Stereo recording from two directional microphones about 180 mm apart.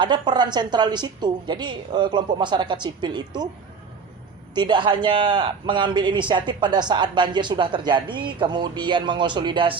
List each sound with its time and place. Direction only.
0.0 s a man's voice: 25° right (ahead or behind)
4.5 s a man's voice: 25° right (ahead or behind)